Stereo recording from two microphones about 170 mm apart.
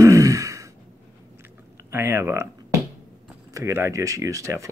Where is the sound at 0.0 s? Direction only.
20° right (ahead or behind).